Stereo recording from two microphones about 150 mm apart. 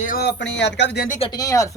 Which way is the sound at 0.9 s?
80° left.